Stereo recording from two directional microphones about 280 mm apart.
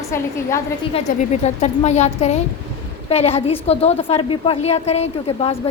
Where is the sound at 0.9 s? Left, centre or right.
Left.